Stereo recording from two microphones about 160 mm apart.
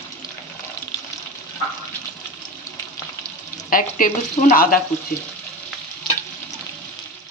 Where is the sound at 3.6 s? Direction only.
60° left (ahead or behind).